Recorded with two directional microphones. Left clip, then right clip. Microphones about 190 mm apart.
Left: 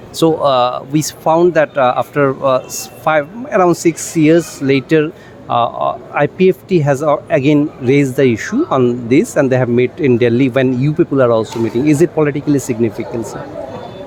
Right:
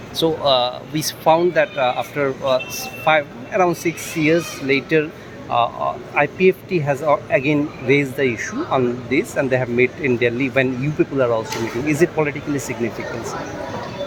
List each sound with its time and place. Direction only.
0.2 s a man's voice: 55° left (ahead or behind)